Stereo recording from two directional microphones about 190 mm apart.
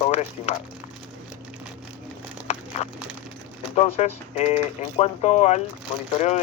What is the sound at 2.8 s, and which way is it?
Speech, 35° left (ahead or behind).